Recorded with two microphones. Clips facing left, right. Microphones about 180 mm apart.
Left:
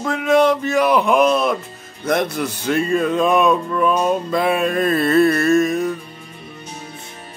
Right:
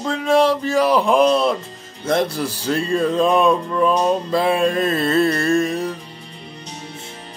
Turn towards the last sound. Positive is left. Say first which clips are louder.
# left 3 dB
turn(degrees=-30)  # may be behind; listen again after turning